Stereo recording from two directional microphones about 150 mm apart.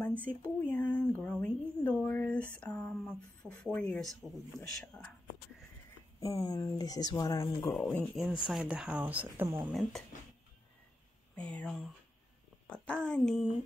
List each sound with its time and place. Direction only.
0.0 s a sound: 10° left (ahead or behind)
3.7 s a child's voice: 5° left (ahead or behind)
6.1 s speech: 20° left (ahead or behind)
8.2 s speech: 5° right (ahead or behind)
11.3 s a child's voice: 5° left (ahead or behind)